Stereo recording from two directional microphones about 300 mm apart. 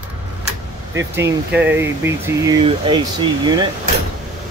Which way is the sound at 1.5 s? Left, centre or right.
Centre.